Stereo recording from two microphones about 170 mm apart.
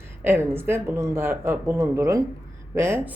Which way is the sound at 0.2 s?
15° right (ahead or behind).